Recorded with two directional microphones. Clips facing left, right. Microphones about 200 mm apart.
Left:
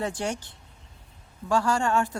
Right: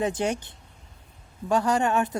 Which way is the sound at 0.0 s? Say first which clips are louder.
Right 4 dB; 20° right (ahead or behind).